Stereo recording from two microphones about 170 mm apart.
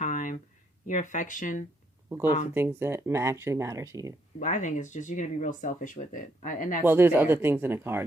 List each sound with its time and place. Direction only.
0.0 s a sound: 50° left (ahead or behind)
0.9 s speech: 50° left (ahead or behind)
2.0 s speech: 15° right (ahead or behind)
4.4 s speech: 45° left (ahead or behind)
6.8 s speech: 10° right (ahead or behind)